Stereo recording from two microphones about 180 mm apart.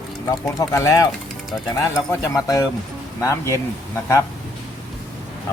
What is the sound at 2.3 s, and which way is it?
Speech, 20° left (ahead or behind).